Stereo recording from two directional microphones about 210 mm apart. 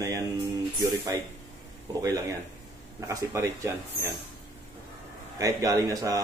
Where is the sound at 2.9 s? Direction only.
15° right (ahead or behind).